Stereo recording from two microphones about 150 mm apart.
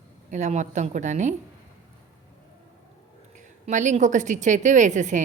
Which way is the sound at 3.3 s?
55° right (ahead or behind).